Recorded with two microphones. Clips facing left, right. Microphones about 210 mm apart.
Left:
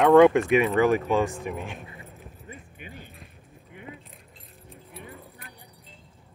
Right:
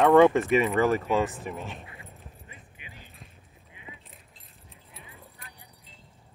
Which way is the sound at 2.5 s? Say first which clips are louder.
Left 8 dB; 50° left (ahead or behind).